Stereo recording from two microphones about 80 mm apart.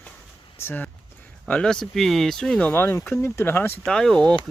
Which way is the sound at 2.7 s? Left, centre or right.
Left.